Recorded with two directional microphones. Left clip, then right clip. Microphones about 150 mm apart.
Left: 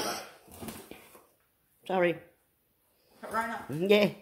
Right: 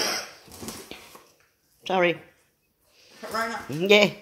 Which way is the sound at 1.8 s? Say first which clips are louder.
Right 5 dB; centre (ahead or behind).